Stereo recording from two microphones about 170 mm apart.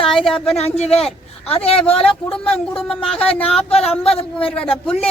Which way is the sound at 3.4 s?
35° left (ahead or behind).